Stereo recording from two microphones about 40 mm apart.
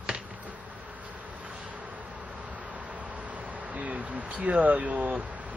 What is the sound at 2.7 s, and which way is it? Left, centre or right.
Speech, right.